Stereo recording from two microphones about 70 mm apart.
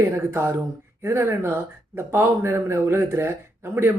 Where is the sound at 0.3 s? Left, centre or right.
Right.